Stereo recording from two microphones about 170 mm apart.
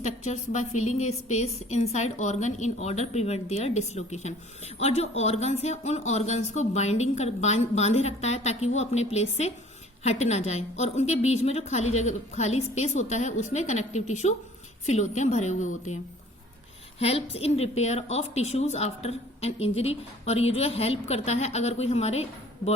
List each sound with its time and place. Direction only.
0.0 s a woman's voice: 40° left (ahead or behind)
17.0 s a woman's voice: 35° left (ahead or behind)